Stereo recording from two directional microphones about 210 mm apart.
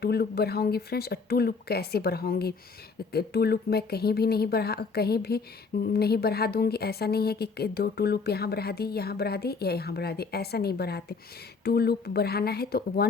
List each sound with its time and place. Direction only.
0.0 s speech: 50° left (ahead or behind)